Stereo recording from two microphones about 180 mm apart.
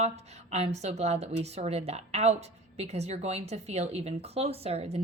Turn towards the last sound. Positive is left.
turn(degrees=-35)  # may be behind; listen again after turning